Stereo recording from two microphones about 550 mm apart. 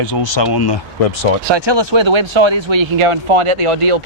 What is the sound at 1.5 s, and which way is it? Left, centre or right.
Speech, right.